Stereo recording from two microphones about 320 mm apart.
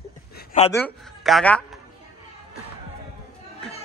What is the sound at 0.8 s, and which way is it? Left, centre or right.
A man's voice, centre.